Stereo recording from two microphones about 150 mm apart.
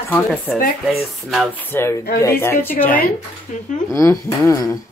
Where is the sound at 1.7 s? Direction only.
15° left (ahead or behind).